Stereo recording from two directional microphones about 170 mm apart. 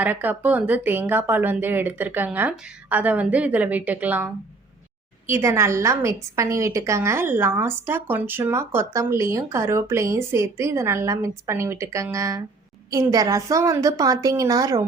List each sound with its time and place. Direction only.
0.0 s a woman's voice: 10° right (ahead or behind)